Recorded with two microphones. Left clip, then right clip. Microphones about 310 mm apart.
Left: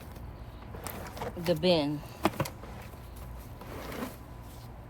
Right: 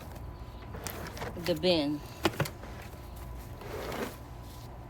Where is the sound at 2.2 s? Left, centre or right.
Centre.